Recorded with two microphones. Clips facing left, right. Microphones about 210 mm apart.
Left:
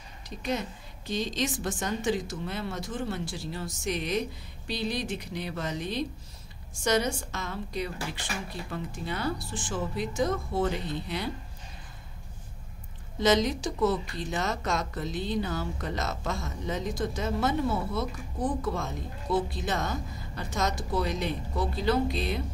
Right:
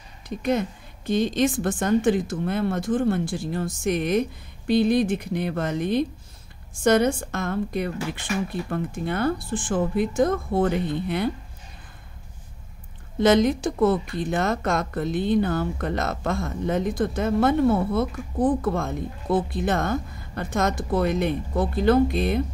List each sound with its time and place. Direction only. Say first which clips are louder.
0.4 s a woman's voice: right 8 dB; 55° right (ahead or behind)
13.2 s speech: right 6 dB; 55° right (ahead or behind)